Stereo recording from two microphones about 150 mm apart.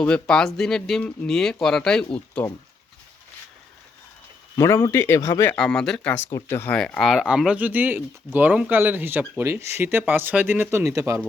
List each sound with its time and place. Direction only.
0.0 s speech: 5° left (ahead or behind)
4.5 s speech: 20° left (ahead or behind)
5.5 s speech: 5° left (ahead or behind)
6.3 s speech: 20° left (ahead or behind)
6.7 s speech: 5° left (ahead or behind); by 11.2 s 20° right (ahead or behind)